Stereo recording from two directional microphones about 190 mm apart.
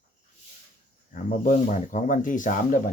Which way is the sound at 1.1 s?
45° left (ahead or behind).